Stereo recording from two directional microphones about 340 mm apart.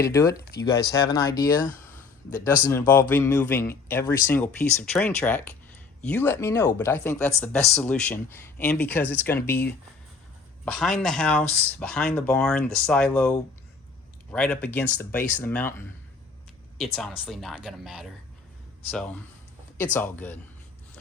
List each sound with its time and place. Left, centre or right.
0.0 s speech: centre
16.7 s speech: centre